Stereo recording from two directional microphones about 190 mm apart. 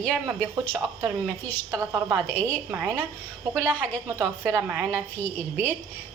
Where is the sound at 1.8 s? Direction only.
15° right (ahead or behind).